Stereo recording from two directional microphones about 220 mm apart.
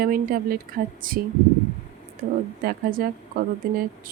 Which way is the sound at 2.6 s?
40° right (ahead or behind).